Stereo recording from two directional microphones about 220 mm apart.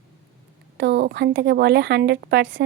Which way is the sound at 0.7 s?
50° right (ahead or behind).